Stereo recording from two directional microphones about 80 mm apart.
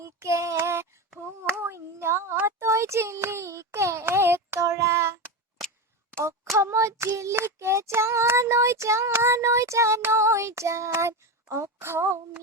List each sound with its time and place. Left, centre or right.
0.0 s a sound: right
0.5 s child singing: right
6.6 s child singing: right